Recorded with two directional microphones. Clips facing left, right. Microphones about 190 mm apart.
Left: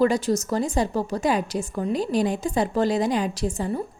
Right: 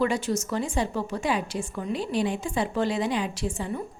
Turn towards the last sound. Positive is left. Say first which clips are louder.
# left 4 dB
turn(degrees=40)  # may be behind; listen again after turning